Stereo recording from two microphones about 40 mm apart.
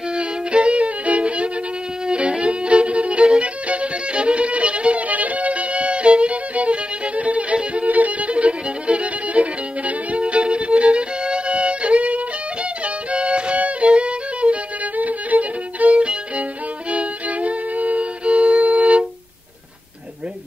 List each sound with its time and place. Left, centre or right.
0.1 s violin: right
12.8 s music: right
16.9 s violin: right